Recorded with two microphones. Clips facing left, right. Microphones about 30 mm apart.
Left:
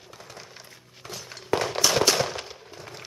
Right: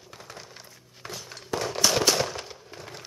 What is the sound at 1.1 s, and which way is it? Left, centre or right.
Walk, centre.